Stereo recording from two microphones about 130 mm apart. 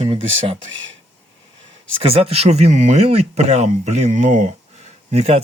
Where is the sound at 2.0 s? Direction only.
50° right (ahead or behind).